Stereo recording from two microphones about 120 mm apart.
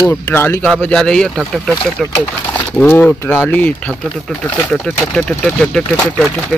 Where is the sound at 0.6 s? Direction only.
5° left (ahead or behind).